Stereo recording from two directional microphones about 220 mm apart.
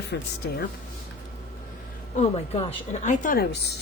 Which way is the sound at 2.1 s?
25° left (ahead or behind).